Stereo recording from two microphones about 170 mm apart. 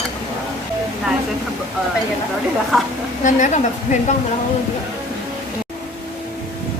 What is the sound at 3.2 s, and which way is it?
Speech, 50° left (ahead or behind).